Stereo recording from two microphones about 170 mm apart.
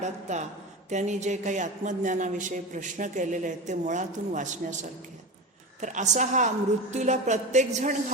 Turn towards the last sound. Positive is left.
turn(degrees=-45)  # may be behind; listen again after turning